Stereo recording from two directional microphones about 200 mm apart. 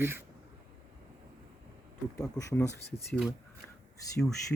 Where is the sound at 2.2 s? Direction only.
15° left (ahead or behind).